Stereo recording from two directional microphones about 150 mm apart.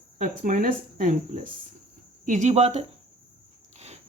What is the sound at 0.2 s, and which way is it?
Speech, 65° right (ahead or behind).